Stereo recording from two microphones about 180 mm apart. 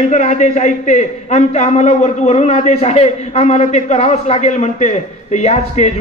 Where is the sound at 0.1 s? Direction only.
40° left (ahead or behind).